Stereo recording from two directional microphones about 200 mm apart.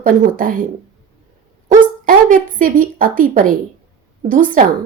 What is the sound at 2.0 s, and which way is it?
A woman's voice, 45° right (ahead or behind).